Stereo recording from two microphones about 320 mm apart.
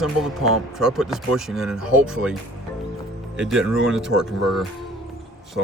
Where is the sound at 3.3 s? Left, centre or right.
Centre.